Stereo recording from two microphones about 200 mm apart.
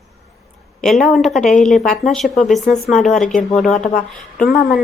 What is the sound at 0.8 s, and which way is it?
Speech, centre (ahead or behind).